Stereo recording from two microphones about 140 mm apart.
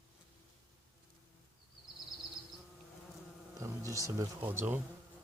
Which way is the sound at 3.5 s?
20° right (ahead or behind).